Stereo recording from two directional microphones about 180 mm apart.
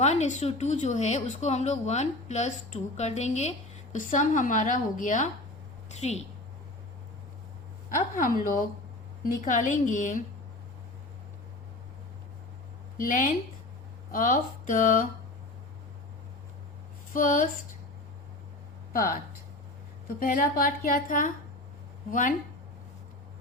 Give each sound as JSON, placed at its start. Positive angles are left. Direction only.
{"t": 0.0, "sound": "a woman's voice", "side_deg": 40}
{"t": 7.9, "sound": "a woman's voice", "side_deg": 50}
{"t": 13.0, "sound": "a woman's voice", "side_deg": 50}
{"t": 17.2, "sound": "a woman's voice", "side_deg": 50}
{"t": 18.9, "sound": "a woman's voice", "side_deg": 50}